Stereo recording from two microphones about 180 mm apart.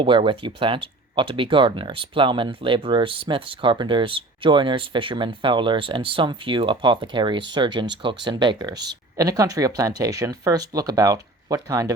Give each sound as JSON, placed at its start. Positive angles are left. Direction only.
{"t": 0.0, "sound": "speech", "side_deg": -30}